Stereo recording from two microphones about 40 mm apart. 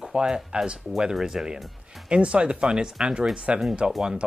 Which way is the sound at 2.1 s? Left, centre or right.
Right.